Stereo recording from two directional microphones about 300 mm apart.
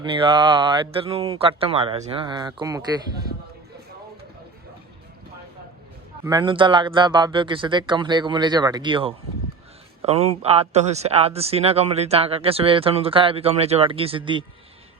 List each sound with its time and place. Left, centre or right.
0.0 s speech: centre
6.2 s speech: centre